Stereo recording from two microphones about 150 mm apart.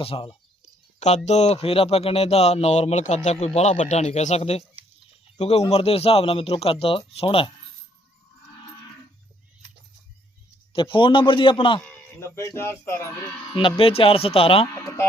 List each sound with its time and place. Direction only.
0.0 s speech: 40° left (ahead or behind)
0.9 s speech: 50° left (ahead or behind)
10.7 s speech: 35° left (ahead or behind)
12.2 s speech: 20° left (ahead or behind)
13.5 s speech: 35° left (ahead or behind)